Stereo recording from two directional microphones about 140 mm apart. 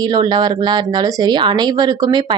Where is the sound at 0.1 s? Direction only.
30° right (ahead or behind).